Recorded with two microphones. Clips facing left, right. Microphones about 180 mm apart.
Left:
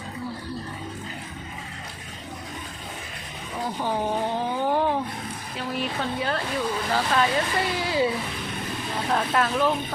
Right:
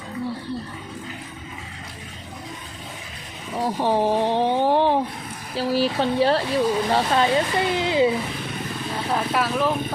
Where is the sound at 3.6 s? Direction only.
30° right (ahead or behind).